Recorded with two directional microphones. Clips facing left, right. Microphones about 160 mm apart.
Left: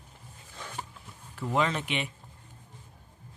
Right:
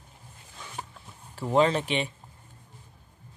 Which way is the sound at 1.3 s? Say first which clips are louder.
Right 6 dB; 30° right (ahead or behind).